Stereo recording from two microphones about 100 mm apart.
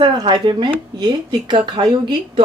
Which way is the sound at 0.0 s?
50° right (ahead or behind).